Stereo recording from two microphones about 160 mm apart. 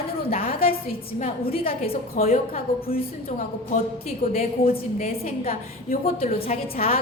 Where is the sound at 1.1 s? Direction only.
50° left (ahead or behind).